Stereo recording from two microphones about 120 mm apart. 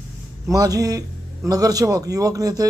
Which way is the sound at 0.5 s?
30° right (ahead or behind).